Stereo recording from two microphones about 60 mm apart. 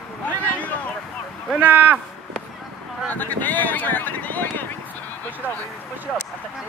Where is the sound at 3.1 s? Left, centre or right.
Left.